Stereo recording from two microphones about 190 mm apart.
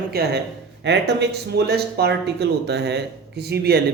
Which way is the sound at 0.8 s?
65° right (ahead or behind).